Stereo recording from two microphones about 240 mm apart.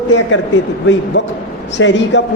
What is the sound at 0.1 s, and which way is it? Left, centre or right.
A man's voice, left.